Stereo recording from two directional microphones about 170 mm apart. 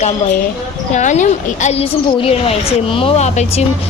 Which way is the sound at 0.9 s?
45° left (ahead or behind).